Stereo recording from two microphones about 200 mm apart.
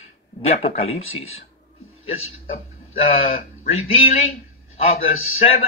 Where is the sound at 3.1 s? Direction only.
30° left (ahead or behind).